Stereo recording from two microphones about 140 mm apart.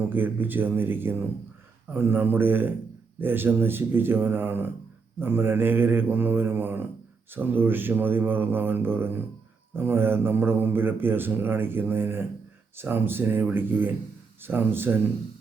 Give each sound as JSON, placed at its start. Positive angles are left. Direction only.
{"t": 0.1, "sound": "speech", "side_deg": -15}